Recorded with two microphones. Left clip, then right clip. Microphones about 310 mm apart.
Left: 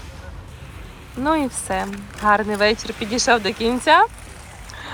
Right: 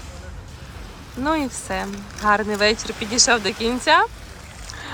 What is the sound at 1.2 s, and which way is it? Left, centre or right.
Speech, centre.